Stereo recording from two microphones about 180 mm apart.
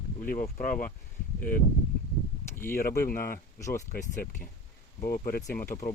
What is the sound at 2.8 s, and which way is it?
Speech, 55° left (ahead or behind).